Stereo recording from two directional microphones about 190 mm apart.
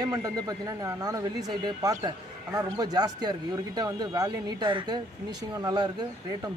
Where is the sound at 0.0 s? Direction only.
20° right (ahead or behind).